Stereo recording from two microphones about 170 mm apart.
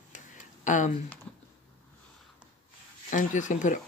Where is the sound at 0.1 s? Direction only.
45° left (ahead or behind).